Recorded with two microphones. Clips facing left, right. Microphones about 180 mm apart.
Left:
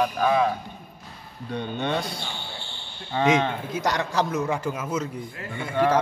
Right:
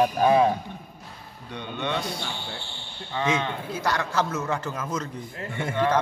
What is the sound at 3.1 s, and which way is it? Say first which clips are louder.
A man's voice: left 5 dB; 20° left (ahead or behind).